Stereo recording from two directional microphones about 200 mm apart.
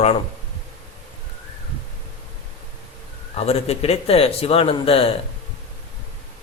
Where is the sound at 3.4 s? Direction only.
30° left (ahead or behind).